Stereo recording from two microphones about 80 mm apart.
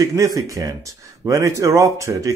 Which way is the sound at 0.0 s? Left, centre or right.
Right.